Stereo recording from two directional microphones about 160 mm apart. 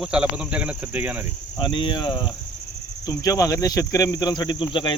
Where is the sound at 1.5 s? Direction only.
30° left (ahead or behind).